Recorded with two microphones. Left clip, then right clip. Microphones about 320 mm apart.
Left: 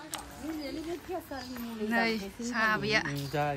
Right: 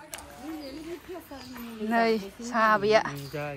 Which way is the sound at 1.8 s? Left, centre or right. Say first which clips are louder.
Right 5 dB; centre.